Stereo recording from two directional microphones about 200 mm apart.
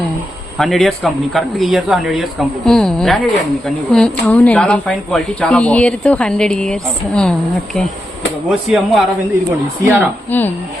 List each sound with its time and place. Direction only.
0.6 s speech: centre (ahead or behind)
8.4 s speech: centre (ahead or behind)
9.8 s speech: 10° right (ahead or behind)